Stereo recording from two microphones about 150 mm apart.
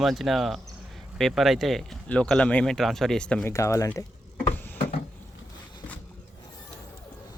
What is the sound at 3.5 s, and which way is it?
Speech, 20° left (ahead or behind).